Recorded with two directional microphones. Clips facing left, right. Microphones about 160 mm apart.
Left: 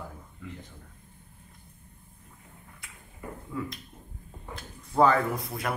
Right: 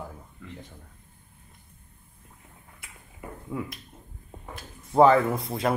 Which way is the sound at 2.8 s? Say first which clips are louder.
Right 1 dB; 20° right (ahead or behind).